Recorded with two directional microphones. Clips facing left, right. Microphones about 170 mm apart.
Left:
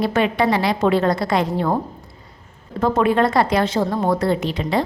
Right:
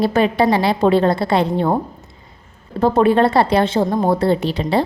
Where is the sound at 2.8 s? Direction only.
30° right (ahead or behind).